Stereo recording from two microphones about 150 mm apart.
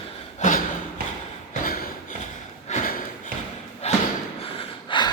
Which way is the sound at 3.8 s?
45° left (ahead or behind).